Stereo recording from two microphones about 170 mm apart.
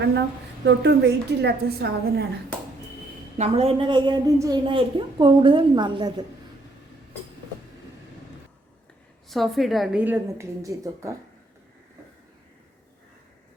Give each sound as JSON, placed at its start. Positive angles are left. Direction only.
{"t": 0.0, "sound": "a woman's voice", "side_deg": -90}
{"t": 3.3, "sound": "a woman's voice", "side_deg": -35}
{"t": 9.3, "sound": "a woman's voice", "side_deg": 0}